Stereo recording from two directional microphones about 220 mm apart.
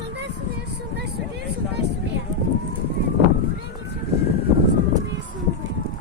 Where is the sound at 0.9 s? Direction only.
50° right (ahead or behind).